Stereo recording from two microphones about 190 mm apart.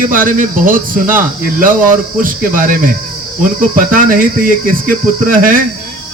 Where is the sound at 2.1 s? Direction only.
45° right (ahead or behind).